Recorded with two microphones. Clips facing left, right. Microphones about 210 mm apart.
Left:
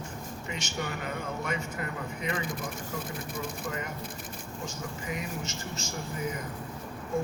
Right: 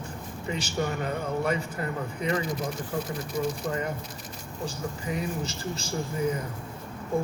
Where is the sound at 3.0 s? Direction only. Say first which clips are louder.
Right 6 dB; 55° left (ahead or behind).